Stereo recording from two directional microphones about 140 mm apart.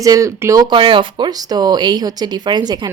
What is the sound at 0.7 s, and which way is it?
A woman's voice, 35° right (ahead or behind).